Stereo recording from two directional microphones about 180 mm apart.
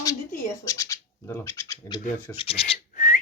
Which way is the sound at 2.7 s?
45° left (ahead or behind).